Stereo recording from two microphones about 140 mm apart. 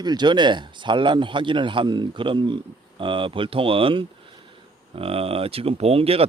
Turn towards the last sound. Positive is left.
turn(degrees=-45)  # may be behind; listen again after turning